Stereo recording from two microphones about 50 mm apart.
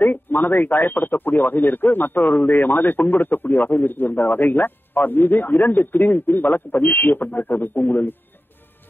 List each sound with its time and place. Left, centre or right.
0.0 s speech: left